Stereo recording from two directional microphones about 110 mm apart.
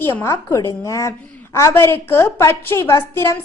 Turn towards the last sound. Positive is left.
turn(degrees=25)  # may be behind; listen again after turning